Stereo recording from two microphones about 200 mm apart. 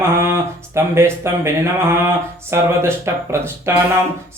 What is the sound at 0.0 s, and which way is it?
Speech, 15° right (ahead or behind).